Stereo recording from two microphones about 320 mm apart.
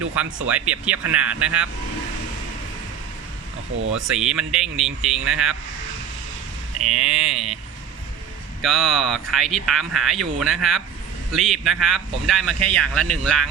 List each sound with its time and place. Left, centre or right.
0.5 s a man's voice: centre
3.8 s speech: right
4.0 s a man's voice: centre
6.8 s a man's voice: centre
8.6 s a man's voice: centre